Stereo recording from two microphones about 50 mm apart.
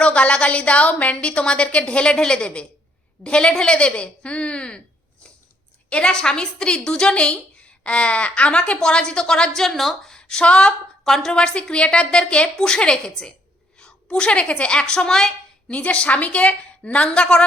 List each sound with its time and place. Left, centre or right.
0.0 s a woman's voice: left
5.9 s a woman's voice: centre
10.1 s speech: centre
11.0 s a woman's voice: centre
15.7 s a woman's voice: left